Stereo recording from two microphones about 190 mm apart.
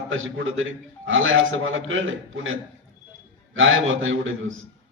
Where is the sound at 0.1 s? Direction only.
90° right.